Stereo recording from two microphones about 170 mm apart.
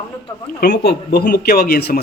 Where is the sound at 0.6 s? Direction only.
70° left (ahead or behind).